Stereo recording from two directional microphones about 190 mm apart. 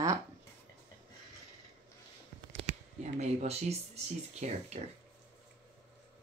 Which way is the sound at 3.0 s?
35° right (ahead or behind).